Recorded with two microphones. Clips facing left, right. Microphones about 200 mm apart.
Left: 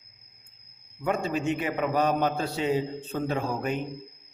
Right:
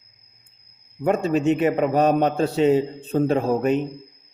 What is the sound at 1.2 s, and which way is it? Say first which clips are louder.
Speech: right 8 dB; 70° right (ahead or behind).